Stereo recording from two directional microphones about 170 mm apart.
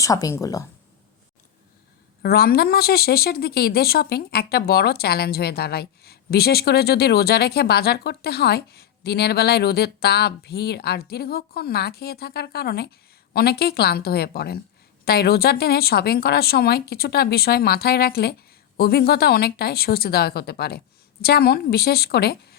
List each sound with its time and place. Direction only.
0.0 s speech: 20° left (ahead or behind)
2.2 s a woman's voice: 65° left (ahead or behind)